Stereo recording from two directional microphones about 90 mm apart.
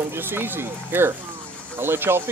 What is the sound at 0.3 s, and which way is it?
Speech, 25° right (ahead or behind).